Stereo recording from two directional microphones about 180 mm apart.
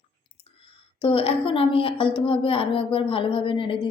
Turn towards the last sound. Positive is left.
turn(degrees=30)  # may be behind; listen again after turning